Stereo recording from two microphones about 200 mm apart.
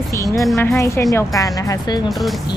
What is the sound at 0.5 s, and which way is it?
Speech, 15° left (ahead or behind).